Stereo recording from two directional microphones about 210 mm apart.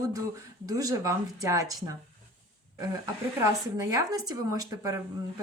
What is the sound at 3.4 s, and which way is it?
A woman's voice, 15° right (ahead or behind).